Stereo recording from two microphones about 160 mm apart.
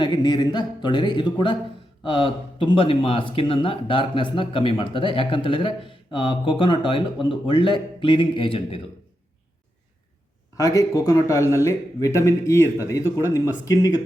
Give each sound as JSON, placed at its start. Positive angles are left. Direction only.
{"t": 0.0, "sound": "speech", "side_deg": 25}
{"t": 10.6, "sound": "speech", "side_deg": 20}